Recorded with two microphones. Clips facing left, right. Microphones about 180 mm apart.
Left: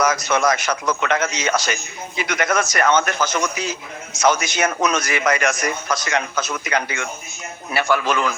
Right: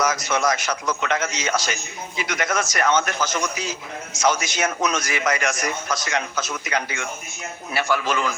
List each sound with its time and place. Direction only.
0.0 s a man's voice: 60° left (ahead or behind)